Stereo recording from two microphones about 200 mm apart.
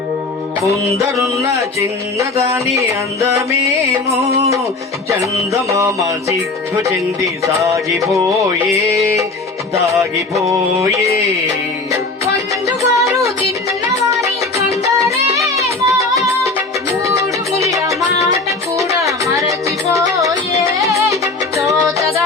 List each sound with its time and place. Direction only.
0.6 s music: 15° right (ahead or behind)
5.6 s music: 15° right (ahead or behind)
7.4 s music: 15° right (ahead or behind)